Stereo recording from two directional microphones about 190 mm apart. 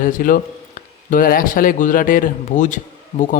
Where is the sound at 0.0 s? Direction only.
45° left (ahead or behind).